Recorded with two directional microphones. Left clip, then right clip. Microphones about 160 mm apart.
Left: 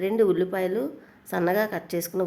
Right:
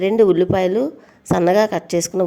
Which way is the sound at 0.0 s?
40° right (ahead or behind).